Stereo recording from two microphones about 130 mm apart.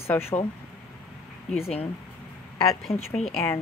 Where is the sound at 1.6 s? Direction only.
50° left (ahead or behind).